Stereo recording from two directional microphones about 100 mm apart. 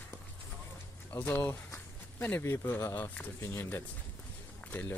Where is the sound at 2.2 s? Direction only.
20° left (ahead or behind).